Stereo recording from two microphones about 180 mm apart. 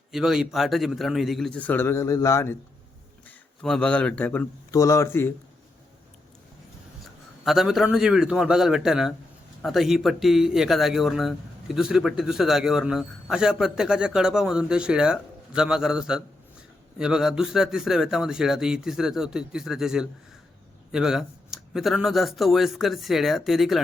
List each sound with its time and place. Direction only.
0.1 s speech: centre (ahead or behind); by 2.6 s 15° left (ahead or behind)
3.2 s a man's voice: 5° left (ahead or behind)
7.4 s speech: centre (ahead or behind)